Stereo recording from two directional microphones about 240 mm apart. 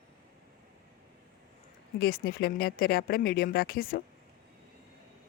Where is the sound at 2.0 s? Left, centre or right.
Left.